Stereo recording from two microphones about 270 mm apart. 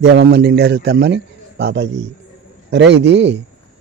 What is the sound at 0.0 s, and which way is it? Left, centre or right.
A man's voice, right.